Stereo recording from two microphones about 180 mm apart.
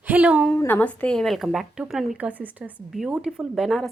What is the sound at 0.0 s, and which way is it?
Speech, 10° right (ahead or behind).